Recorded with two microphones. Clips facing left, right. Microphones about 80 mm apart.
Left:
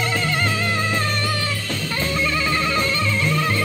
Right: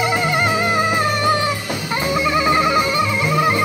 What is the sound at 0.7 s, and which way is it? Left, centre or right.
Music, centre.